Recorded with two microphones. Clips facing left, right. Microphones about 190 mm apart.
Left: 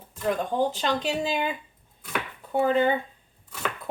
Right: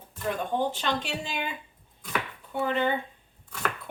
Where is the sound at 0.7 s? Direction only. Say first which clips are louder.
Left 4 dB; 40° left (ahead or behind).